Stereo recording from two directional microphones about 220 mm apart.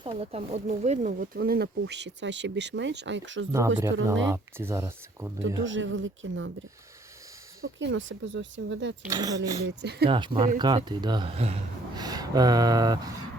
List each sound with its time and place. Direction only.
0.0 s speech: 25° right (ahead or behind); by 4.3 s 60° right (ahead or behind)
4.3 s speech: 10° right (ahead or behind)
5.6 s speech: 60° right (ahead or behind)
7.6 s speech: 55° right (ahead or behind)
9.0 s speech: 15° right (ahead or behind)
9.6 s speech: 50° right (ahead or behind)
10.1 s speech: 20° right (ahead or behind)
12.0 s a sound: 15° right (ahead or behind)